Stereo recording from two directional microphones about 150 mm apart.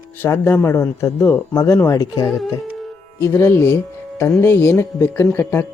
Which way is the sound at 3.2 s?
15° left (ahead or behind).